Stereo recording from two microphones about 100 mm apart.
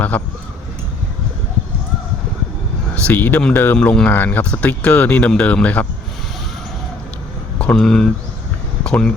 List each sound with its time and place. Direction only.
0.1 s speech: 10° left (ahead or behind)
2.9 s speech: 15° left (ahead or behind)
7.6 s speech: 10° left (ahead or behind)
8.8 s a sound: 10° left (ahead or behind)